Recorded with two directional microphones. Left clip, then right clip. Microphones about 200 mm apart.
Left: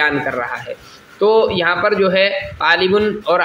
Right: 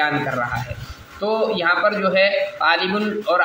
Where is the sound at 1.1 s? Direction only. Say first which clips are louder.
Left 7 dB; 55° left (ahead or behind).